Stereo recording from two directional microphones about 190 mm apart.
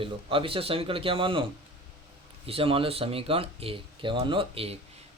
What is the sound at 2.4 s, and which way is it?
A man's voice, 30° right (ahead or behind).